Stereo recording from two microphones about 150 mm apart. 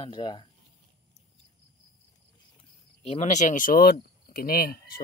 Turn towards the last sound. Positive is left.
turn(degrees=85)